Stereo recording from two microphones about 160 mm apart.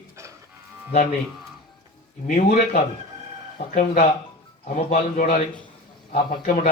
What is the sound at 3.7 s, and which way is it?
A man's voice, 50° left (ahead or behind).